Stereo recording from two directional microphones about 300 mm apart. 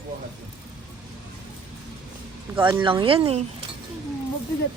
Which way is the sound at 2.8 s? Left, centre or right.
Centre.